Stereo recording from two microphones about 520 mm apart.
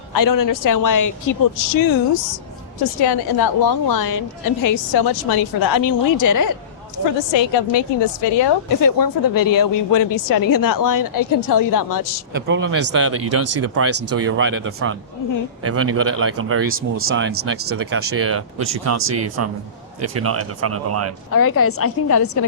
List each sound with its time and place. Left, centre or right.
0.1 s a woman's voice: left
7.2 s a woman's voice: left
8.4 s a woman's voice: left
12.5 s speech: right
21.3 s a woman's voice: left